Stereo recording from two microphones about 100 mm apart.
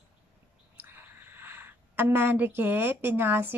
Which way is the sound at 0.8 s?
20° right (ahead or behind).